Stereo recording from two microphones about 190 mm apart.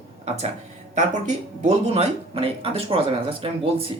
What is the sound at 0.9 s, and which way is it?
Speech, 40° right (ahead or behind).